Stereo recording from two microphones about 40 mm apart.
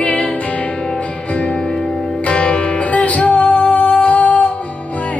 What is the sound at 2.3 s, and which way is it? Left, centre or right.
Music, left.